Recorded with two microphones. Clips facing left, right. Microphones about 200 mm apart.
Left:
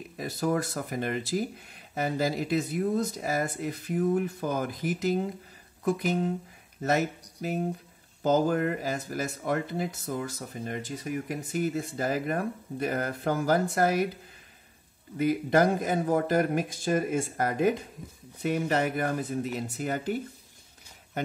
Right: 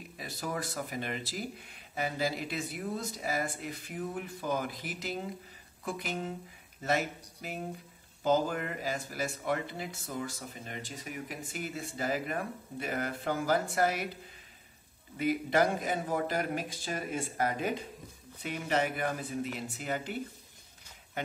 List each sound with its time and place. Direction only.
0.2 s speech: 45° left (ahead or behind)
15.1 s speech: 45° left (ahead or behind)